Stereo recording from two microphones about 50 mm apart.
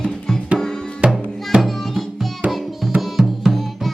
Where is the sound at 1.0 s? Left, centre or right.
Right.